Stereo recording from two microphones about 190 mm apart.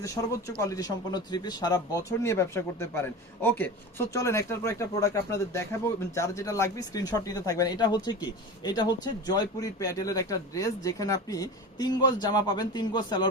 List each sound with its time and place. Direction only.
0.0 s speech: 15° left (ahead or behind)